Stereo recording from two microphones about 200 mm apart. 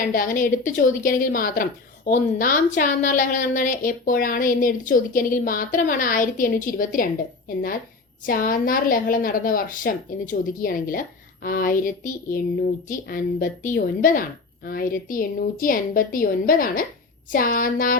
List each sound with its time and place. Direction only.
0.1 s a woman's voice: 45° left (ahead or behind)